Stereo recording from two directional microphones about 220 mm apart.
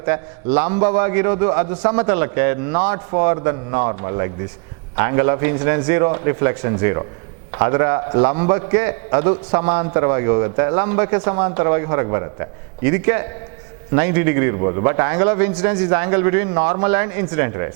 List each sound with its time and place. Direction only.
0.0 s a man's voice: 10° right (ahead or behind)